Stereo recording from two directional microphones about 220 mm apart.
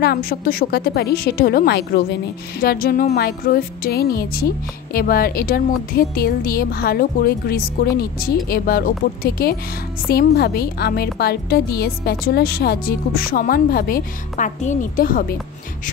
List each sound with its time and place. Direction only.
0.0 s a woman's voice: 40° left (ahead or behind)